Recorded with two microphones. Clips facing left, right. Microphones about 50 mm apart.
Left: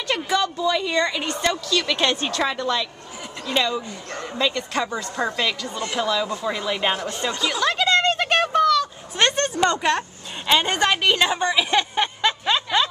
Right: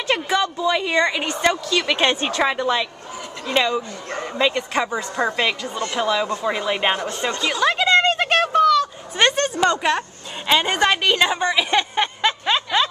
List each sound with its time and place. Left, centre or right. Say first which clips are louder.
0.1 s speech: right 2 dB; centre
7.0 s speech: right 2 dB; centre
7.2 s speech: right 1 dB; centre
7.5 s a sound: right 4 dB; centre